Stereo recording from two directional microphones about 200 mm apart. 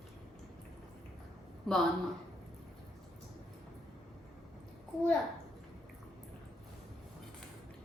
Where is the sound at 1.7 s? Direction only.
5° left (ahead or behind).